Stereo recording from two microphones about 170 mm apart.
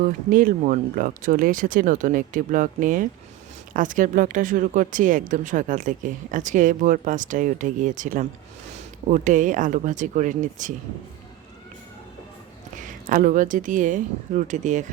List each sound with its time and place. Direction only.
0.3 s speech: 55° right (ahead or behind)
12.8 s speech: 50° right (ahead or behind)